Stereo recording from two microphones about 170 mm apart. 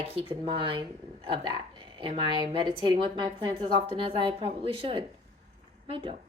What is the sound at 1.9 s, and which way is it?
Speech, 30° right (ahead or behind).